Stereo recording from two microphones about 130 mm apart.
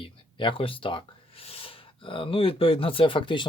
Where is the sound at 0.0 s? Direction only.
40° left (ahead or behind).